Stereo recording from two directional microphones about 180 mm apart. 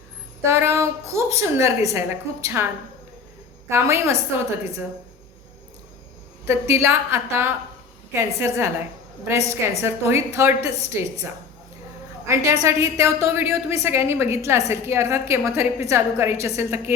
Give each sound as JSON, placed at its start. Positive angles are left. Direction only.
{"t": 0.4, "sound": "a woman's voice", "side_deg": -15}
{"t": 3.7, "sound": "a woman's voice", "side_deg": -15}
{"t": 6.4, "sound": "a woman's voice", "side_deg": -15}
{"t": 10.7, "sound": "a woman's voice", "side_deg": 35}
{"t": 12.2, "sound": "a woman's voice", "side_deg": -15}